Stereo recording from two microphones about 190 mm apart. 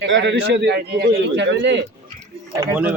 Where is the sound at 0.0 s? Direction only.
70° right (ahead or behind).